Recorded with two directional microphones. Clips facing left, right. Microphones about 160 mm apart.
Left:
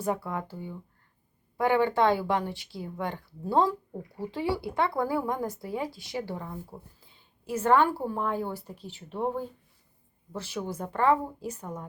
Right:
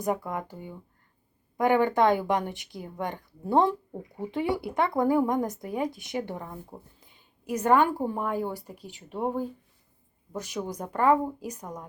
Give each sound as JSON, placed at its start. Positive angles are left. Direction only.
{"t": 0.0, "sound": "a woman's voice", "side_deg": -15}